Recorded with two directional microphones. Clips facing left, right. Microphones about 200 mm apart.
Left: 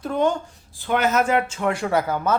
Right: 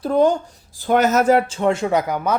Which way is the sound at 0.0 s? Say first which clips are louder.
Right 5 dB; 35° right (ahead or behind).